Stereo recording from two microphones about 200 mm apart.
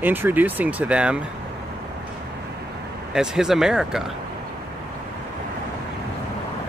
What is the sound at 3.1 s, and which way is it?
Speech, 5° right (ahead or behind).